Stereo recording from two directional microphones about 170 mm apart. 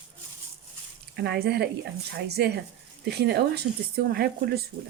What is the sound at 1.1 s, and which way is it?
Speech, 75° right (ahead or behind).